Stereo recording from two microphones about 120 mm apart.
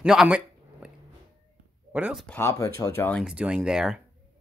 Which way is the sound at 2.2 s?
20° left (ahead or behind).